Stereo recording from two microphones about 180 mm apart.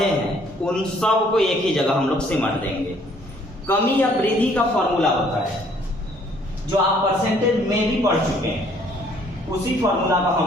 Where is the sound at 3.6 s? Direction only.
10° left (ahead or behind).